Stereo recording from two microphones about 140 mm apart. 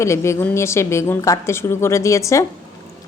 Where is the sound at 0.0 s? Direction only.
20° left (ahead or behind).